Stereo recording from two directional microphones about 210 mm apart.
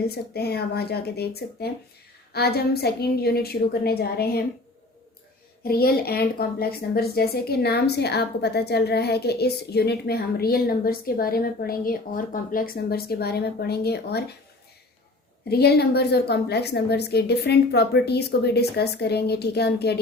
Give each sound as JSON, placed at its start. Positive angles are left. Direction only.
{"t": 0.1, "sound": "a woman's voice", "side_deg": 50}
{"t": 5.6, "sound": "a woman's voice", "side_deg": 45}
{"t": 15.4, "sound": "a woman's voice", "side_deg": 50}